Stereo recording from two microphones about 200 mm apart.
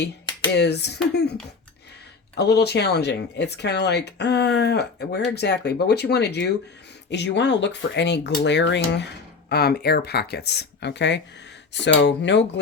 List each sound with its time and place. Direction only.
0.5 s speech: 55° left (ahead or behind)